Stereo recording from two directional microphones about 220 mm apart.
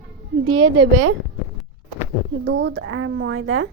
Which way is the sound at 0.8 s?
80° right.